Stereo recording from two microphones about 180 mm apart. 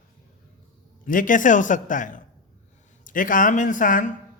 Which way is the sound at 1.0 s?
50° left (ahead or behind).